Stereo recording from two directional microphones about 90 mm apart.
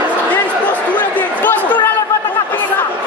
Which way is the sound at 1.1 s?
20° left (ahead or behind).